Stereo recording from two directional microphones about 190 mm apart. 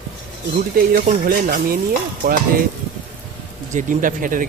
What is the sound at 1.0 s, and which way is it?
Speech, 50° right (ahead or behind).